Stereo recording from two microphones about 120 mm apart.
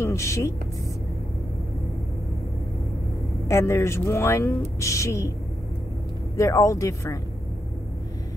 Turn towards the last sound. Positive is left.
turn(degrees=25)  # may be behind; listen again after turning